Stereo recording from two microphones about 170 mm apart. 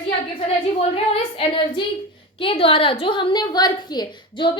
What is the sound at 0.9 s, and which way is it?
A woman's voice, 30° left (ahead or behind).